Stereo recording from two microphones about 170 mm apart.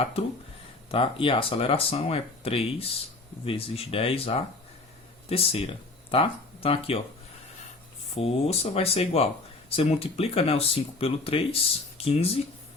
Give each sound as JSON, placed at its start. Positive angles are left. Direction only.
{"t": 0.0, "sound": "speech", "side_deg": 35}
{"t": 8.1, "sound": "speech", "side_deg": 35}